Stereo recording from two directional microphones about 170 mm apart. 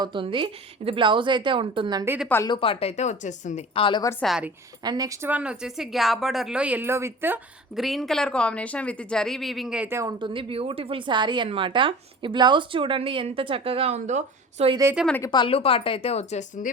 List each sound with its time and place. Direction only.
0.0 s a woman's voice: 30° right (ahead or behind)
2.4 s speech: 30° left (ahead or behind); by 3.6 s 45° left (ahead or behind)
3.8 s a woman's voice: 30° left (ahead or behind)
4.2 s a woman's voice: 5° right (ahead or behind)
4.8 s a woman's voice: 20° right (ahead or behind)
5.3 s a woman's voice: 5° right (ahead or behind)
7.8 s a woman's voice: centre (ahead or behind); by 14.7 s 45° right (ahead or behind)
15.3 s speech: 30° left (ahead or behind)